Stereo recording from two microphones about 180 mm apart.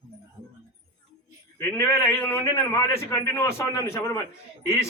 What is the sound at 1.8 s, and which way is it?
A man's voice, 15° left (ahead or behind).